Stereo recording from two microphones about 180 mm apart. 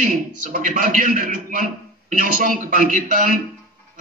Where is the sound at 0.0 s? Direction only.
45° right (ahead or behind).